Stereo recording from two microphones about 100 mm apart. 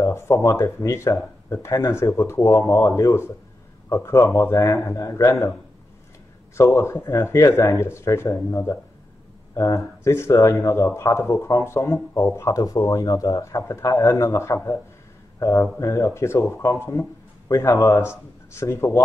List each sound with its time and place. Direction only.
0.0 s speech: 30° left (ahead or behind)
6.5 s speech: 30° left (ahead or behind)